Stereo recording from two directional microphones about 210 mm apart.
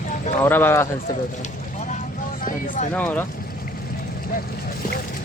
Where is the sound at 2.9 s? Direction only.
10° left (ahead or behind).